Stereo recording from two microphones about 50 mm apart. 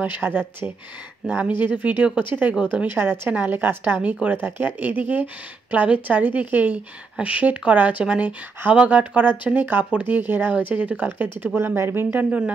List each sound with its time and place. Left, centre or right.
0.0 s speech: right
2.9 s speech: right
3.3 s speech: right
3.6 s speech: right
4.0 s speech: right
4.4 s speech: right
11.1 s speech: right
11.5 s speech: right
12.3 s speech: right